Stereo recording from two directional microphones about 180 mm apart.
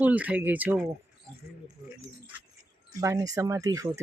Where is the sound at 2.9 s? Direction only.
20° right (ahead or behind).